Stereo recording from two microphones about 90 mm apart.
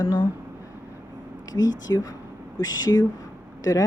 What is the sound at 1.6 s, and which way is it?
Speech, 45° left (ahead or behind).